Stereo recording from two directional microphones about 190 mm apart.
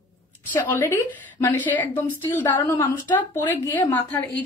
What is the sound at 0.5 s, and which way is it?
A woman's voice, 10° left (ahead or behind).